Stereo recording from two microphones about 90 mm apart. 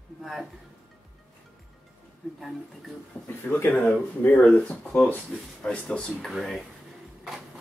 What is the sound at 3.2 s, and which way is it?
Speech, 20° left (ahead or behind).